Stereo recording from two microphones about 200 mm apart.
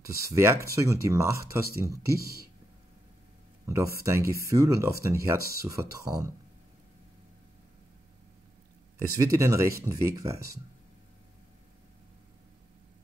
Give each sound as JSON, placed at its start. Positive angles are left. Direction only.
{"t": 0.0, "sound": "speech", "side_deg": -15}
{"t": 2.1, "sound": "speech", "side_deg": -50}
{"t": 3.6, "sound": "speech", "side_deg": -15}
{"t": 9.1, "sound": "speech", "side_deg": -15}